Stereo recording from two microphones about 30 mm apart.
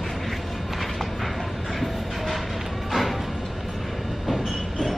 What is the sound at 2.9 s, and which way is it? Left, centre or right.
Music, centre.